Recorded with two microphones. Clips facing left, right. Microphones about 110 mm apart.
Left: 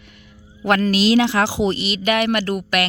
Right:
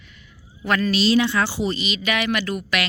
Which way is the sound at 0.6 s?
70° left (ahead or behind).